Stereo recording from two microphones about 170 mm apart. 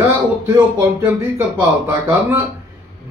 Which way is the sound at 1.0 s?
15° right (ahead or behind).